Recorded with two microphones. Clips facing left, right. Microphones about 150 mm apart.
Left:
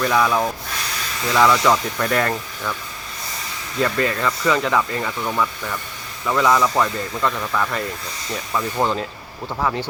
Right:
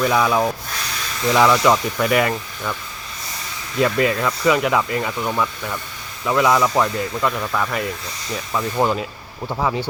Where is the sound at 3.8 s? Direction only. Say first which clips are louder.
Right 2 dB; 5° right (ahead or behind).